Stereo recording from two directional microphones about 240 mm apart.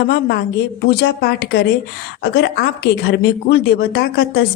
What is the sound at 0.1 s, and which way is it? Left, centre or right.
Speech, left.